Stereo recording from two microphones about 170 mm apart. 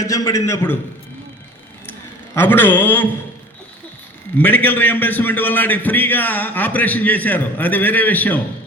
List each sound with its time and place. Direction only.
0.0 s a man's voice: 20° left (ahead or behind)
1.9 s a sound: 10° left (ahead or behind)
4.4 s a man's voice: 10° left (ahead or behind)